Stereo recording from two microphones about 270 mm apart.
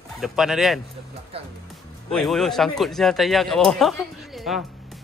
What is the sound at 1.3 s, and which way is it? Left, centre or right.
Speech, right.